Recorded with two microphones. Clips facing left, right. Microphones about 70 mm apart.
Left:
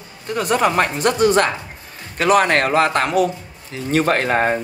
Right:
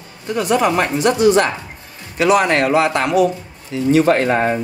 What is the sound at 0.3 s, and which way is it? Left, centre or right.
Speech, left.